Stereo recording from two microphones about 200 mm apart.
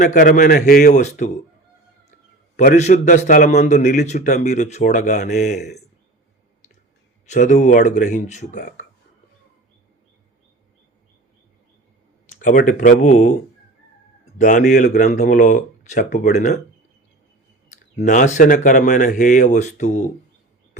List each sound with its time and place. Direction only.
0.0 s a man's voice: 40° left (ahead or behind)
2.6 s a man's voice: 35° left (ahead or behind)
5.5 s a man's voice: 55° left (ahead or behind)
7.3 s a man's voice: 40° left (ahead or behind)
12.4 s a man's voice: 40° left (ahead or behind)
14.3 s a man's voice: 40° left (ahead or behind)
18.0 s a man's voice: 40° left (ahead or behind)